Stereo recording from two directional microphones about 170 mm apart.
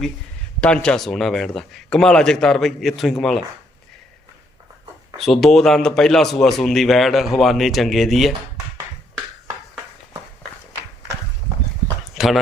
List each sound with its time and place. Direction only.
0.6 s speech: 5° left (ahead or behind)
5.1 s speech: centre (ahead or behind)
12.1 s a sound: centre (ahead or behind)